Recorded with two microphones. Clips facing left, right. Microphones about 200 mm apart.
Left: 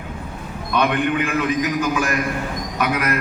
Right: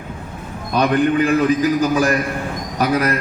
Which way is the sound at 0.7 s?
35° right (ahead or behind).